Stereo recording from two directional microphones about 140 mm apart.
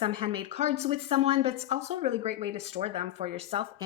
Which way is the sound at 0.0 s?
40° right (ahead or behind).